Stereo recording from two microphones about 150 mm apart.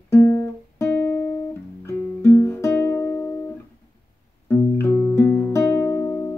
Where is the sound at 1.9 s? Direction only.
15° left (ahead or behind).